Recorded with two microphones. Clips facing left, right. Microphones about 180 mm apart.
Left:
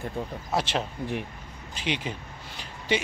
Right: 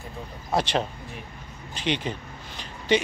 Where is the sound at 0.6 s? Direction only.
Centre (ahead or behind).